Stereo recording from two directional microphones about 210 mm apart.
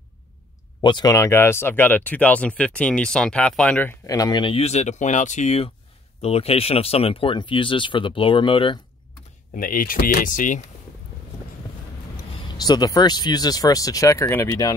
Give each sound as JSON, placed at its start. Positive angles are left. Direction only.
{"t": 0.7, "sound": "speech", "side_deg": 20}
{"t": 9.6, "sound": "speech", "side_deg": 40}
{"t": 12.4, "sound": "speech", "side_deg": 20}